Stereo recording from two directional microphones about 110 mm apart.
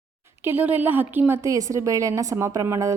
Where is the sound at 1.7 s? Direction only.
30° right (ahead or behind).